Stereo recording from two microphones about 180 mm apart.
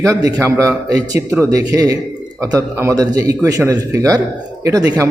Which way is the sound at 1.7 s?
20° right (ahead or behind).